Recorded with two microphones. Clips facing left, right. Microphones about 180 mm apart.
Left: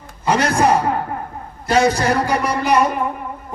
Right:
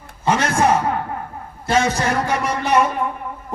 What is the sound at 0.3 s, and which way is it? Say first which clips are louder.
A man's voice: left 1 dB; 35° left (ahead or behind).